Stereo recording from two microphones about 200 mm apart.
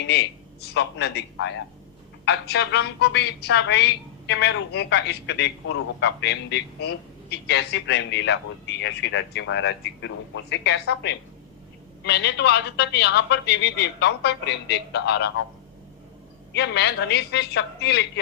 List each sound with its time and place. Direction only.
0.0 s a woman's voice: 55° left (ahead or behind)
16.6 s a woman's voice: 55° left (ahead or behind)